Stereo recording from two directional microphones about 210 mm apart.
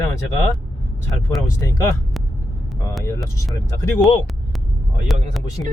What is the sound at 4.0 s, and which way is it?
Speech, centre (ahead or behind).